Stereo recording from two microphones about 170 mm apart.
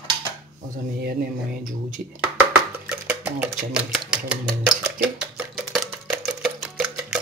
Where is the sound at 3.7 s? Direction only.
5° right (ahead or behind).